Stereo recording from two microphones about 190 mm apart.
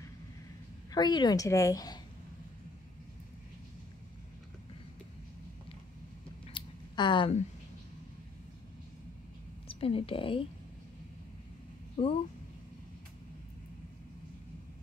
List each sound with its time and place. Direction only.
0.9 s a woman's voice: 20° left (ahead or behind)
6.5 s a sound: 25° left (ahead or behind)
9.7 s a woman's voice: 30° left (ahead or behind)
12.0 s speech: 30° left (ahead or behind)